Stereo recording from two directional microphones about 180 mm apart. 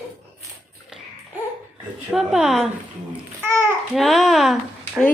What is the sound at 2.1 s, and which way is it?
Speech, 5° right (ahead or behind).